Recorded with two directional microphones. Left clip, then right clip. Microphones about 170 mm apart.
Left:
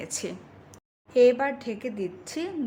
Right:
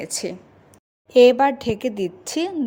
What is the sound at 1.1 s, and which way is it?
A woman's voice, 45° right (ahead or behind).